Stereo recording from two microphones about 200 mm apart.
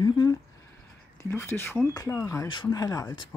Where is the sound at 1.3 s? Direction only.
10° left (ahead or behind).